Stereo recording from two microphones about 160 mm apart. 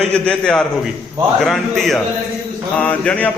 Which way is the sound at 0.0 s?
5° left (ahead or behind).